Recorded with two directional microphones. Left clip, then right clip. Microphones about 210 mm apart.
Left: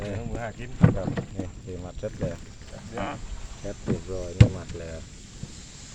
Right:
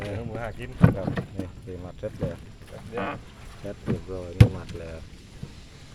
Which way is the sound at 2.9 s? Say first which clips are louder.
Right 2 dB; 35° right (ahead or behind).